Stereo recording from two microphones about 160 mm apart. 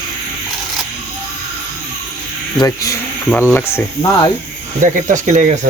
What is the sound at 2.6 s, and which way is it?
Speech, 20° left (ahead or behind).